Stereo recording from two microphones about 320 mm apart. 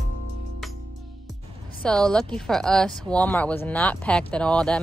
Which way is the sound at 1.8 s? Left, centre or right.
Centre.